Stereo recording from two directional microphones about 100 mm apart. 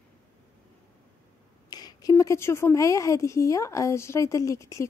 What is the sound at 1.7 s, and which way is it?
Speech, 40° left (ahead or behind).